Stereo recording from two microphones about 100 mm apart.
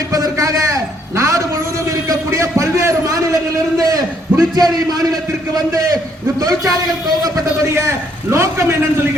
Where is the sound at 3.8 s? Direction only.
40° right (ahead or behind).